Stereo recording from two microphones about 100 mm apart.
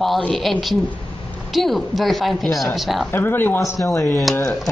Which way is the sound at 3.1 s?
20° left (ahead or behind).